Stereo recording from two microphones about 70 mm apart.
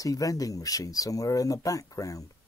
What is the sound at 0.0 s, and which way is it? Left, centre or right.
Speech, left.